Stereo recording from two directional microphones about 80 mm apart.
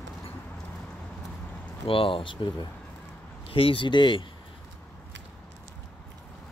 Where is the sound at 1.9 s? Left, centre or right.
Left.